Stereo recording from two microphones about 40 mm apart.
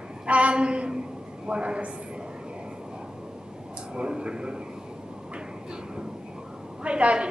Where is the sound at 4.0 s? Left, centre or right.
Right.